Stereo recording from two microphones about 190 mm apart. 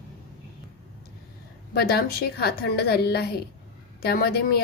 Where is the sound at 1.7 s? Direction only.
55° left (ahead or behind).